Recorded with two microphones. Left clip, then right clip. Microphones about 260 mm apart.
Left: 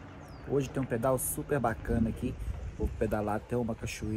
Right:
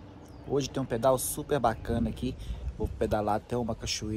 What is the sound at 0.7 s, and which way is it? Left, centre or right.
Speech, centre.